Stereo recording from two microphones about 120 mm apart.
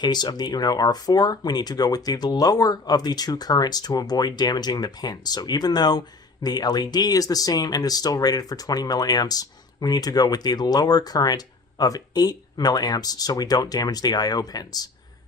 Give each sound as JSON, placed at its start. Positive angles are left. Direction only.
{"t": 0.0, "sound": "speech", "side_deg": 35}